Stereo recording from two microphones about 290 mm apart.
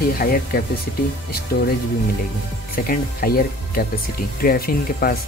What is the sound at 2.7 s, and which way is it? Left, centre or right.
Speech, left.